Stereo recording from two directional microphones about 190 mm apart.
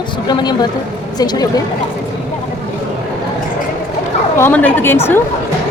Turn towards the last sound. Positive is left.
turn(degrees=10)  # may be behind; listen again after turning